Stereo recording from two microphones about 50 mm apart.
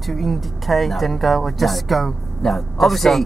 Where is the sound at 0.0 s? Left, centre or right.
Centre.